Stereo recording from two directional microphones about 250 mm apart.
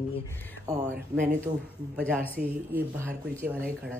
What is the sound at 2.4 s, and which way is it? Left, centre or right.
Speech, right.